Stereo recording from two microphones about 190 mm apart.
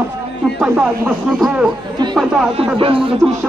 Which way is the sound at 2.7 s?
25° right (ahead or behind).